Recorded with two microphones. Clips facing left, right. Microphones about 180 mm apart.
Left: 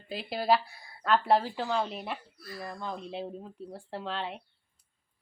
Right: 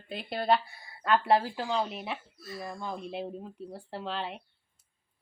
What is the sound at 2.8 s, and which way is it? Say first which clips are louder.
A woman's voice: even; 5° right (ahead or behind).